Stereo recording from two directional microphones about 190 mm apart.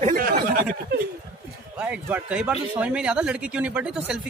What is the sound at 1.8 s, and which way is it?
A man's voice, 5° right (ahead or behind).